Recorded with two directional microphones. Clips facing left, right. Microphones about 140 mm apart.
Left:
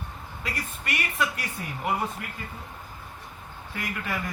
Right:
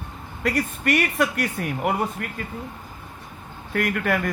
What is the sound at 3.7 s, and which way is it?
Speech, 65° right (ahead or behind).